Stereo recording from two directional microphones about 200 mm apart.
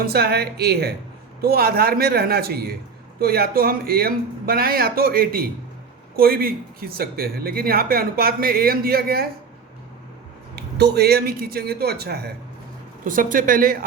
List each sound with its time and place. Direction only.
0.0 s speech: 50° right (ahead or behind)
10.5 s speech: 55° right (ahead or behind)
13.1 s speech: 40° right (ahead or behind)